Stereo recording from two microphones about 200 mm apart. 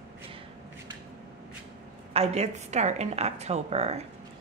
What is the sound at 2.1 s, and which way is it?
Speech, 30° right (ahead or behind).